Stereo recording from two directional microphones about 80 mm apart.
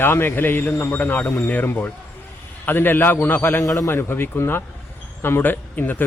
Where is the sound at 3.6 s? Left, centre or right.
Left.